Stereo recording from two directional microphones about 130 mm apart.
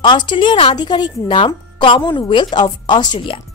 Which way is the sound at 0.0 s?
35° left (ahead or behind).